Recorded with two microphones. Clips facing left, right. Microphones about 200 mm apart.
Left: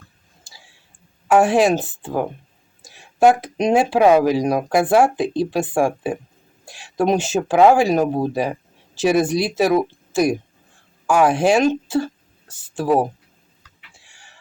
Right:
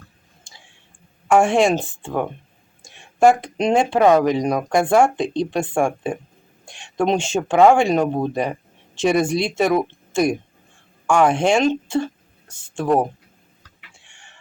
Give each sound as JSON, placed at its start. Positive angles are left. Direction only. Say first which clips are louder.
{"t": 0.4, "sound": "tick-tock", "louder": "left 1 dB", "side_deg": 5}
{"t": 1.3, "sound": "speech", "louder": "left 1 dB", "side_deg": 5}
{"t": 13.9, "sound": "chicken", "louder": "even", "side_deg": 5}